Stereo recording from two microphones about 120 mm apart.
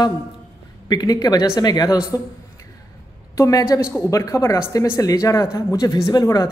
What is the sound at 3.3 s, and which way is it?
A man's voice, 25° left (ahead or behind).